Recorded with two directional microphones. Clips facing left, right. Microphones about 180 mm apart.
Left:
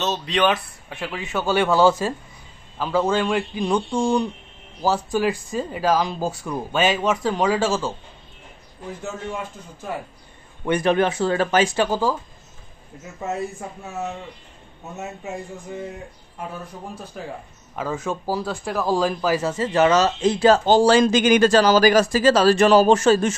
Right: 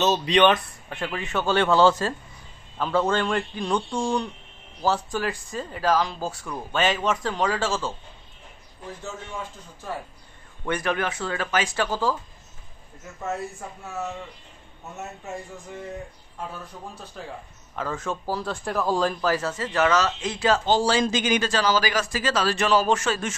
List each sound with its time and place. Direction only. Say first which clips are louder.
0.0 s speech: right 2 dB; centre (ahead or behind)
10.6 s speech: left 7 dB; 20° left (ahead or behind)
17.1 s speech: left 4 dB; 10° left (ahead or behind); by 23.3 s 35° left (ahead or behind)